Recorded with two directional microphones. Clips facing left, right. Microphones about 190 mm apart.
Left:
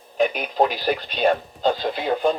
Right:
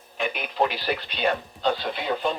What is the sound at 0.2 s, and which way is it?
Speech, 40° left (ahead or behind).